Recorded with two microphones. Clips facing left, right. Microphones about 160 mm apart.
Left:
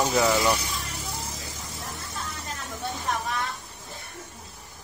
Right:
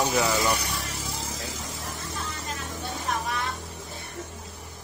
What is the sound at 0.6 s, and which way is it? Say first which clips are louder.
Vehicle: right 1 dB; 75° right (ahead or behind).